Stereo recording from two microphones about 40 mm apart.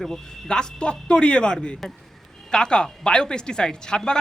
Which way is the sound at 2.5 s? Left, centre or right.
Centre.